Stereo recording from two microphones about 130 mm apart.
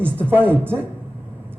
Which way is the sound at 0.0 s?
15° right (ahead or behind).